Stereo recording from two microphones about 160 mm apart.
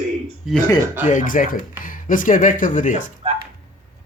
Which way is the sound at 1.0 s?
55° left (ahead or behind).